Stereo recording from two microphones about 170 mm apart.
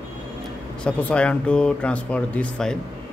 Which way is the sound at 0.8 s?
5° left (ahead or behind).